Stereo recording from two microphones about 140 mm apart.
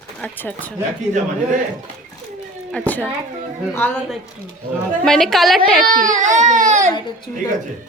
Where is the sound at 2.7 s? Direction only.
10° left (ahead or behind).